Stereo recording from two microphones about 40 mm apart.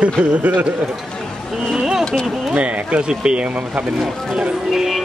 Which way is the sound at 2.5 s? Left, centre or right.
Right.